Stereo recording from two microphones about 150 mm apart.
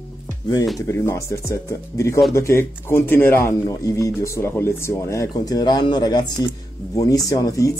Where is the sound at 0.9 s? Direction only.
20° left (ahead or behind).